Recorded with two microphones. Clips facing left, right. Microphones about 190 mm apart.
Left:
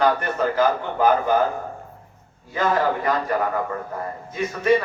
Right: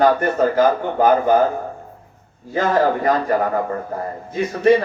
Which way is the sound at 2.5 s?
40° right (ahead or behind).